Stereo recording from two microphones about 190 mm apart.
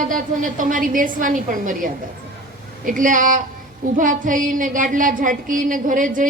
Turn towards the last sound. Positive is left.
turn(degrees=-45)  # may be behind; listen again after turning